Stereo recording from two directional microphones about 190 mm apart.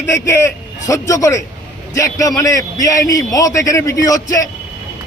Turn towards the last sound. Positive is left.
turn(degrees=20)  # may be behind; listen again after turning